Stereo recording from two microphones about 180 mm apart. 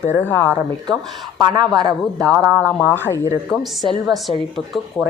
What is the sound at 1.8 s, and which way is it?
Speech, 20° right (ahead or behind).